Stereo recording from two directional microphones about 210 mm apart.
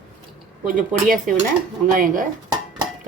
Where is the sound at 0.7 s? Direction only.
40° right (ahead or behind).